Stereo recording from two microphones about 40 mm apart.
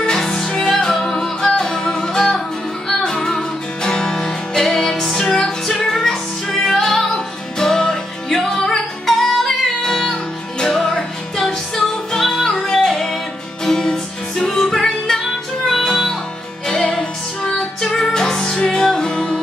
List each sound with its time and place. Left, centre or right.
0.0 s music: centre
12.7 s music: centre